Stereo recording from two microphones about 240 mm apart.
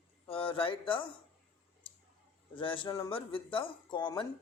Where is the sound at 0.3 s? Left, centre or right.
Left.